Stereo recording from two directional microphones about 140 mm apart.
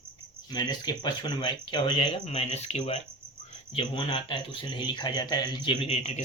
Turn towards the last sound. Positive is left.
turn(degrees=50)  # may be behind; listen again after turning